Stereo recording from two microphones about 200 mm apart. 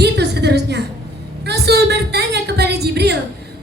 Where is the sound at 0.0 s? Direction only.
55° right (ahead or behind).